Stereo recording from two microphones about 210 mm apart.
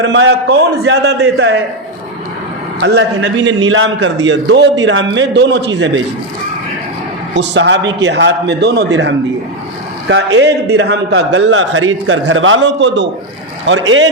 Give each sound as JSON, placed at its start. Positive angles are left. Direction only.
{"t": 0.0, "sound": "a man's voice", "side_deg": -65}
{"t": 2.8, "sound": "a man's voice", "side_deg": -60}
{"t": 7.3, "sound": "a man's voice", "side_deg": -55}
{"t": 10.3, "sound": "a man's voice", "side_deg": -55}